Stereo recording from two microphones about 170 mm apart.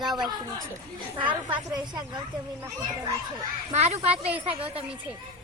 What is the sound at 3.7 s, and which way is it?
Speech, 40° right (ahead or behind).